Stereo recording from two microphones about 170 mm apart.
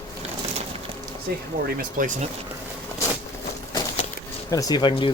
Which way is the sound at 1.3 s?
65° right (ahead or behind).